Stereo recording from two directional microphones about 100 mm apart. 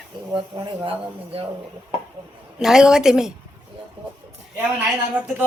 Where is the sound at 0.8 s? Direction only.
70° right (ahead or behind).